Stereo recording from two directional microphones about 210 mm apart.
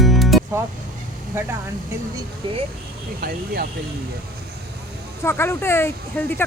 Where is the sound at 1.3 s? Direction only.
10° right (ahead or behind).